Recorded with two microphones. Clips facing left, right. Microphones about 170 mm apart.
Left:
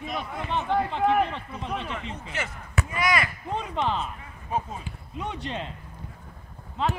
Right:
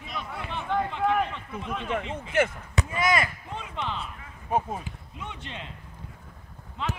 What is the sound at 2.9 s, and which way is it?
Speech, 25° right (ahead or behind).